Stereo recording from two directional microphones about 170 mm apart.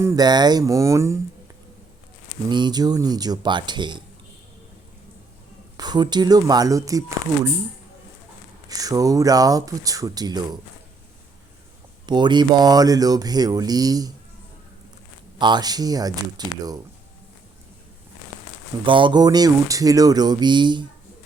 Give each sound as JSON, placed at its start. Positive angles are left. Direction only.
{"t": 0.0, "sound": "speech", "side_deg": -20}
{"t": 2.5, "sound": "speech", "side_deg": -25}
{"t": 5.7, "sound": "speech", "side_deg": -25}
{"t": 8.7, "sound": "speech", "side_deg": -20}
{"t": 12.0, "sound": "speech", "side_deg": -25}
{"t": 15.4, "sound": "speech", "side_deg": -25}
{"t": 18.9, "sound": "speech", "side_deg": -30}